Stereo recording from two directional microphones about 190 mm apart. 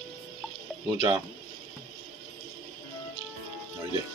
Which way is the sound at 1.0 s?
20° right (ahead or behind).